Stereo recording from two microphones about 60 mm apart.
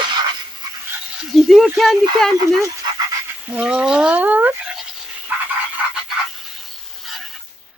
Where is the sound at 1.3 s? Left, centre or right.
Centre.